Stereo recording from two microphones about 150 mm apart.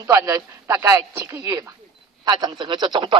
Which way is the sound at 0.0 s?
20° right (ahead or behind).